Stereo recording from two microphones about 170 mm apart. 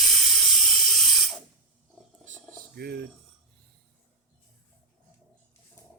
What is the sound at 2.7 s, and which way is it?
Cutlery, 70° right (ahead or behind).